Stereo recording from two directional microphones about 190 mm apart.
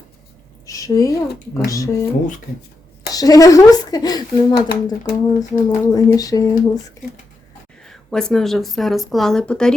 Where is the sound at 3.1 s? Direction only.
20° left (ahead or behind).